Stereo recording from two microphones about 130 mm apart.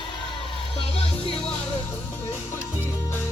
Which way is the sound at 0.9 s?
50° left (ahead or behind).